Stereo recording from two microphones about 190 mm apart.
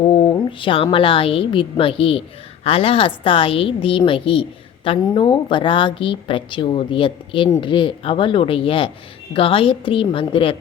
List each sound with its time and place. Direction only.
0.0 s a woman's voice: 25° left (ahead or behind)